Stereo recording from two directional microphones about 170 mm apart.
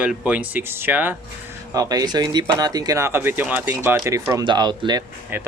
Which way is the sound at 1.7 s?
20° right (ahead or behind).